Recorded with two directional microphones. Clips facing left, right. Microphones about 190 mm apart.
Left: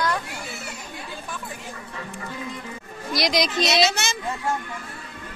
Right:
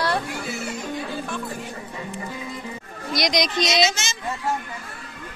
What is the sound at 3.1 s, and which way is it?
Speech, centre (ahead or behind).